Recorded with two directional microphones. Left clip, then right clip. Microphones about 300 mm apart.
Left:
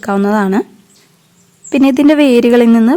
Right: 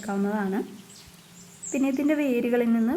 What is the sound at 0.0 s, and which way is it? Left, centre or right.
Speech, left.